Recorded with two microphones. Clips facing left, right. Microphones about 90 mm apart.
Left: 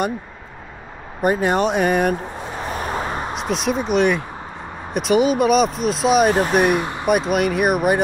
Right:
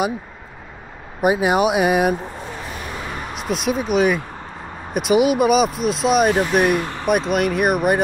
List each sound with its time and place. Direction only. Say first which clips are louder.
1.2 s speech: right 1 dB; 10° right (ahead or behind)
2.6 s a sound: left 10 dB; 40° left (ahead or behind)
3.3 s speech: right 1 dB; centre (ahead or behind)
6.8 s vehicle: left 1 dB; 15° left (ahead or behind)
7.1 s speech: even; centre (ahead or behind)